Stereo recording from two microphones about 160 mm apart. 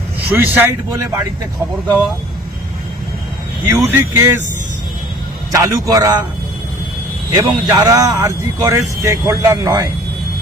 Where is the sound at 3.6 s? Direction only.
15° right (ahead or behind).